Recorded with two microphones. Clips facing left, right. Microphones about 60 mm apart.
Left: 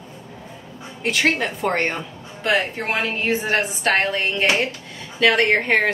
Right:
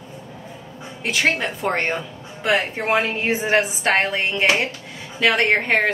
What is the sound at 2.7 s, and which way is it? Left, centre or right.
A woman's voice, right.